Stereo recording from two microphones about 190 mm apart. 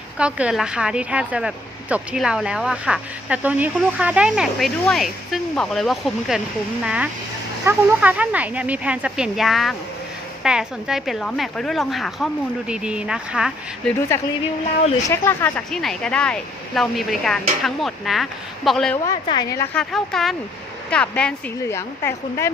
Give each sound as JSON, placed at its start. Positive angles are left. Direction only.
{"t": 0.2, "sound": "a woman's voice", "side_deg": -5}
{"t": 14.1, "sound": "a woman's voice", "side_deg": 15}
{"t": 19.0, "sound": "a woman's voice", "side_deg": 25}
{"t": 19.7, "sound": "a woman's voice", "side_deg": 0}